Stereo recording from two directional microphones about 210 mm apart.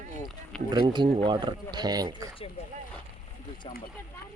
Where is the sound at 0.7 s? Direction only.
20° right (ahead or behind).